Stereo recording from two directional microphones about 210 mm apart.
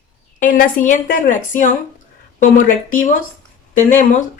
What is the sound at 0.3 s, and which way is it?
A woman's voice, 40° left (ahead or behind).